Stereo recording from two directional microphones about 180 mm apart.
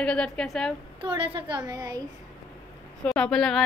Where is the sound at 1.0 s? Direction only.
30° right (ahead or behind).